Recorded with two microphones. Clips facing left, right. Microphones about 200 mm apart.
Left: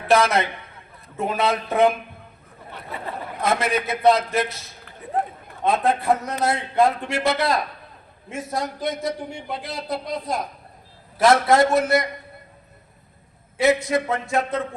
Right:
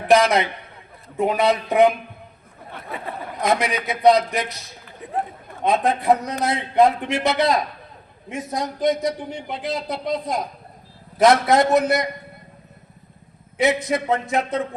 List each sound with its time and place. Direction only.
1.1 s speech: 15° right (ahead or behind)
2.7 s speech: 55° right (ahead or behind)
3.4 s speech: 15° right (ahead or behind)
5.6 s a man's voice: 15° right (ahead or behind)
13.6 s a man's voice: 20° right (ahead or behind)